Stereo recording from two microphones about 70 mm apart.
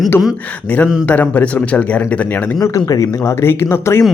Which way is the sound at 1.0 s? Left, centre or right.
Left.